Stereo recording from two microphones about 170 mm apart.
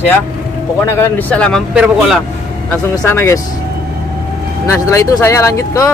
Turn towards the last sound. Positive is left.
turn(degrees=15)  # may be behind; listen again after turning